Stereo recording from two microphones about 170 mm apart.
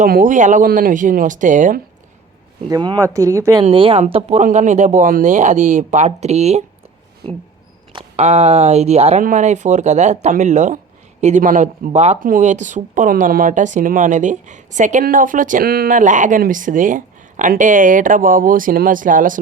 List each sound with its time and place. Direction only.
0.0 s speech: 50° right (ahead or behind)
2.6 s speech: 25° right (ahead or behind)
3.6 s speech: 30° right (ahead or behind)
4.0 s speech: 40° right (ahead or behind)
7.9 s speech: 35° right (ahead or behind)